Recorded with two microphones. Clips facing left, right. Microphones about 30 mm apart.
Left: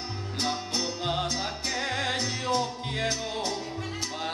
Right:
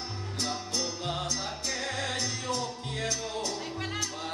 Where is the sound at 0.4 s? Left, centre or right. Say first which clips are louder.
Left 3 dB; left.